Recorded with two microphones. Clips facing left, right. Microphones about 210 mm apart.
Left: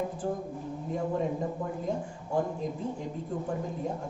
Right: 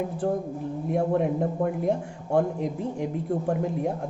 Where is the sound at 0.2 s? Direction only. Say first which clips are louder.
Right 6 dB; 70° right (ahead or behind).